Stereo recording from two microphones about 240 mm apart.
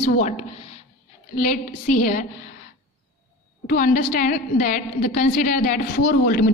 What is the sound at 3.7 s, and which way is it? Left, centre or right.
A woman's voice, left.